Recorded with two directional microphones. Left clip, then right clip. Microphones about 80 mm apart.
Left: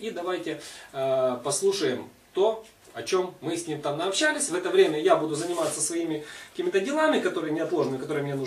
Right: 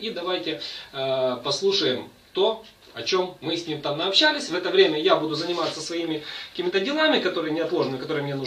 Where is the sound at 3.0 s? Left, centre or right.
Centre.